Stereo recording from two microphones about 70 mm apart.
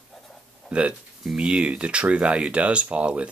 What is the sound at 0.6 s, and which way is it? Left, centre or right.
Speech, centre.